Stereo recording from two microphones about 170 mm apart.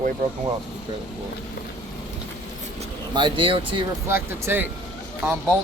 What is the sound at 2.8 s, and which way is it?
Speech, 30° right (ahead or behind).